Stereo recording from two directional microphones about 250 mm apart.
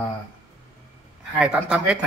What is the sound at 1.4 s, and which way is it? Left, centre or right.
Speech, centre.